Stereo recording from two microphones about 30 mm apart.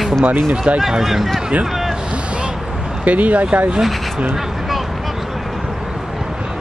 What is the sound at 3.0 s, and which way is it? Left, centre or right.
Speech, right.